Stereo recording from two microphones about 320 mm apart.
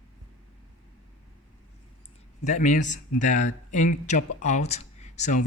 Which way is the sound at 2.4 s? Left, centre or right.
Left.